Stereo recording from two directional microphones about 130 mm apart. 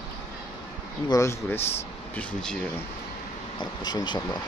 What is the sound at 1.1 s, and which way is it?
Speech, 20° left (ahead or behind).